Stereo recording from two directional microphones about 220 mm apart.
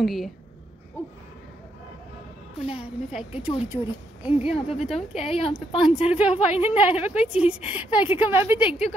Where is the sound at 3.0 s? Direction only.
Centre (ahead or behind).